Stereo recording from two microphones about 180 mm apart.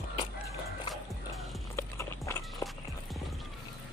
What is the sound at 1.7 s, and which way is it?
Clip-clop, 15° left (ahead or behind).